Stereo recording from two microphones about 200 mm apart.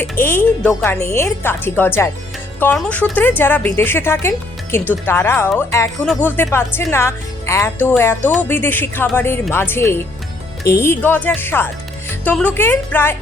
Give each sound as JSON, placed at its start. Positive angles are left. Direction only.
{"t": 0.0, "sound": "a woman's voice", "side_deg": 10}